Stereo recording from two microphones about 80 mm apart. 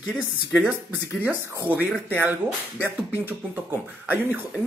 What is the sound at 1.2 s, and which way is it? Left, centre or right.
Speech, right.